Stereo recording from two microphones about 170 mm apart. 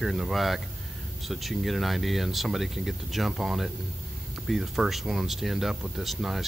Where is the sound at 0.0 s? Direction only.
Centre (ahead or behind).